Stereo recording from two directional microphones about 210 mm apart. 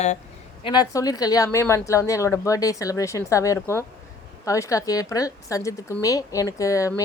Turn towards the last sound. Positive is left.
turn(degrees=15)  # may be behind; listen again after turning